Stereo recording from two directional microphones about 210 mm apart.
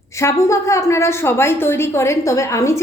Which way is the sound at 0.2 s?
15° left (ahead or behind).